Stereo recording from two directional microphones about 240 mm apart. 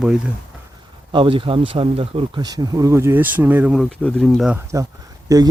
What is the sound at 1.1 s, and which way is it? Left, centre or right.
Speech, right.